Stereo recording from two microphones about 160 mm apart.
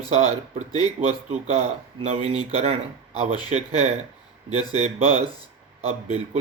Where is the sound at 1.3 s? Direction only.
40° right (ahead or behind).